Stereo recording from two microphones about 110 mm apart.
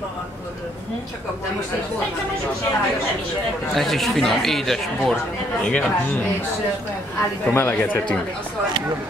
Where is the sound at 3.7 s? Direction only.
Centre (ahead or behind).